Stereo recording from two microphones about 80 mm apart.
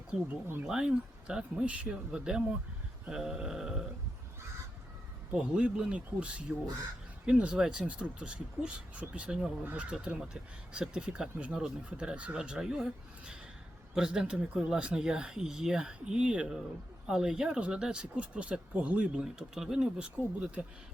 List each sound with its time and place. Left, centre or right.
0.3 s speech: right
0.6 s speech: centre
5.3 s speech: centre